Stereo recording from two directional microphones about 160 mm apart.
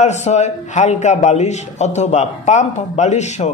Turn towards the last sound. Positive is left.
turn(degrees=45)  # may be behind; listen again after turning